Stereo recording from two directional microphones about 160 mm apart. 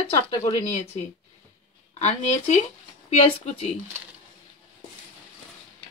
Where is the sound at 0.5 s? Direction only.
45° left (ahead or behind).